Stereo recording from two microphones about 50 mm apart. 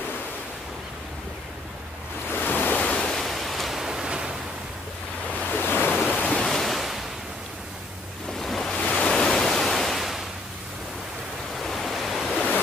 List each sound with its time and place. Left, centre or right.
2.3 s waves: left
3.1 s pink noise: centre
5.4 s waves: left
6.3 s waves: centre
8.4 s waves: centre
8.7 s waves: centre
11.5 s waves: centre